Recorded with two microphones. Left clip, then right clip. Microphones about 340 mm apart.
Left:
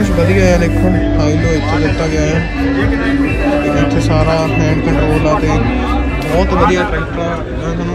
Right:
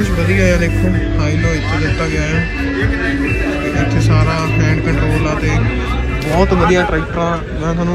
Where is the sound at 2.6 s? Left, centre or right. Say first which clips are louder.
Left 3 dB; left.